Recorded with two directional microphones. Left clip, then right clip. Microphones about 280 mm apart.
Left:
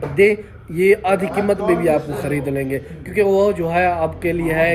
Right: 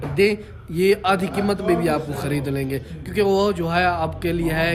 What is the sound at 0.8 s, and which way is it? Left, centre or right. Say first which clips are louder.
Speech: left 3 dB; centre.